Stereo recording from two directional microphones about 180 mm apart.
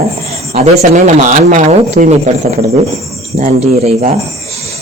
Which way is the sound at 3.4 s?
45° right (ahead or behind).